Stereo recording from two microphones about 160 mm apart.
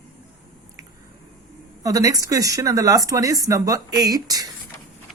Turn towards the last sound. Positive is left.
turn(degrees=-25)  # may be behind; listen again after turning